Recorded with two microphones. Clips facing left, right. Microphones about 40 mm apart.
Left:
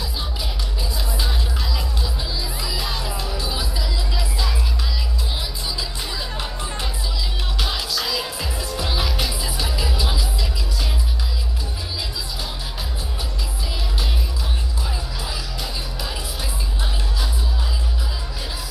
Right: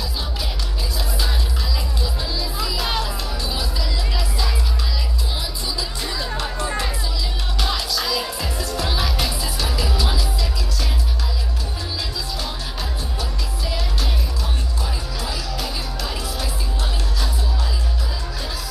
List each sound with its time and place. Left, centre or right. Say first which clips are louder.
2.5 s music: right 5 dB; right
7.5 s music: right 2 dB; left